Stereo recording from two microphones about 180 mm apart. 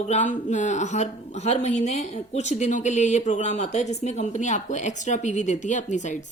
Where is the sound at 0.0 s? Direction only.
40° left (ahead or behind).